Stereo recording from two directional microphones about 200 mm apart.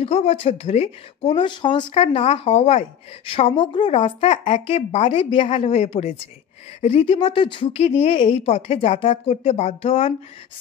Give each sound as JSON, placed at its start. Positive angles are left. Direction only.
{"t": 0.0, "sound": "speech", "side_deg": 30}